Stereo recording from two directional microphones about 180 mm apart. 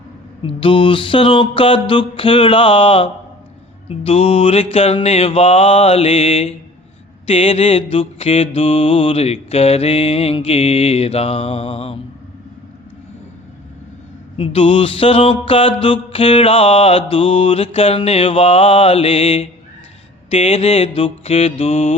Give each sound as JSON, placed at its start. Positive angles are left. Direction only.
{"t": 0.4, "sound": "music", "side_deg": 30}
{"t": 3.8, "sound": "mantra", "side_deg": 35}
{"t": 14.3, "sound": "mantra", "side_deg": 30}